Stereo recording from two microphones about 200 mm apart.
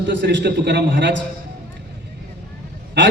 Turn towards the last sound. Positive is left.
turn(degrees=-60)  # may be behind; listen again after turning